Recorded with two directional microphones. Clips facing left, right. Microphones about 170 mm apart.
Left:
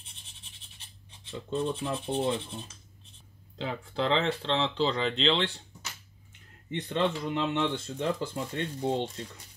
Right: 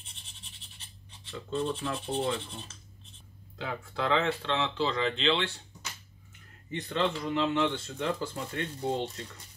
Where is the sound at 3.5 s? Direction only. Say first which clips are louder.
Left 3 dB; 30° left (ahead or behind).